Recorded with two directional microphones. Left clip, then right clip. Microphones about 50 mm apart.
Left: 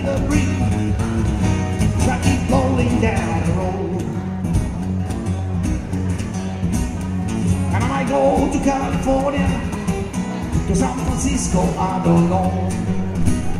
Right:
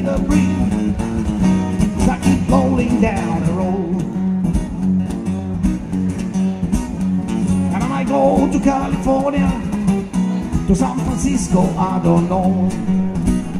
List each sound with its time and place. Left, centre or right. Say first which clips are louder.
0.1 s music: right 3 dB; right
8.0 s music: right 2 dB; right